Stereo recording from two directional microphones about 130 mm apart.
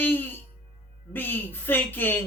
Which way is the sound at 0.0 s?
15° left (ahead or behind).